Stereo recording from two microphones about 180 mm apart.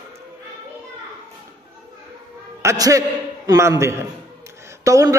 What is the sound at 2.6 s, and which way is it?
A man's voice, 20° right (ahead or behind).